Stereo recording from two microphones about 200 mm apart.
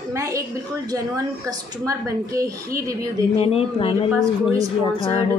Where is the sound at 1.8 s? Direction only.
15° right (ahead or behind).